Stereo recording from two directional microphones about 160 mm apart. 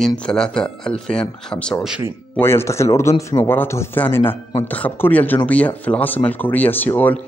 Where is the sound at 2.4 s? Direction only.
15° left (ahead or behind).